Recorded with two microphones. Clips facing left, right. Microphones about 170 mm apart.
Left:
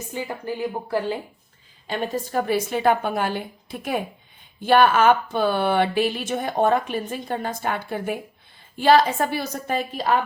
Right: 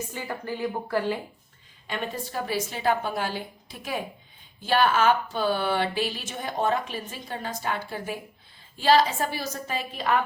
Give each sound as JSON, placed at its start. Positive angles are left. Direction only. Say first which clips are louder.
{"t": 0.1, "sound": "a woman's voice", "louder": "left 4 dB", "side_deg": 15}
{"t": 2.3, "sound": "speech", "louder": "left 8 dB", "side_deg": 55}